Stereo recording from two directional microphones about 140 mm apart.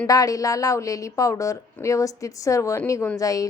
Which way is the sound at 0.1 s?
25° left (ahead or behind).